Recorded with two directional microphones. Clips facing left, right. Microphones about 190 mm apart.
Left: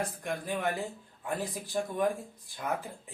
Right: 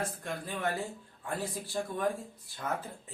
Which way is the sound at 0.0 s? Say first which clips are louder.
Left 2 dB; 15° left (ahead or behind).